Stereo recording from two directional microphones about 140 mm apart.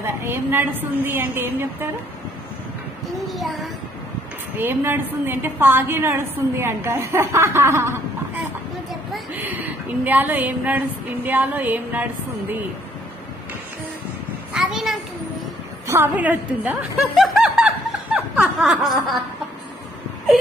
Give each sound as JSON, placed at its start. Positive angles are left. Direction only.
{"t": 0.0, "sound": "a woman's voice", "side_deg": -15}
{"t": 3.3, "sound": "a child's voice", "side_deg": 0}
{"t": 4.6, "sound": "a woman's voice", "side_deg": -15}
{"t": 9.3, "sound": "a woman's voice", "side_deg": -15}
{"t": 14.5, "sound": "a sound", "side_deg": -5}
{"t": 15.9, "sound": "a woman's voice", "side_deg": -15}
{"t": 17.2, "sound": "snicker", "side_deg": -5}
{"t": 18.1, "sound": "laughter", "side_deg": -5}